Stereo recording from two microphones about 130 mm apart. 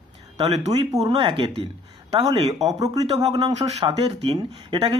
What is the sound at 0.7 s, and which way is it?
Speech, 35° right (ahead or behind).